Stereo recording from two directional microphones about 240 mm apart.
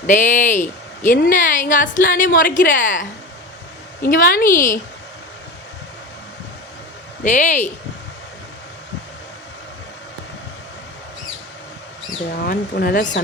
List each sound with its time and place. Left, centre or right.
0.1 s a woman's voice: left
7.3 s a woman's voice: left
12.3 s a woman's voice: left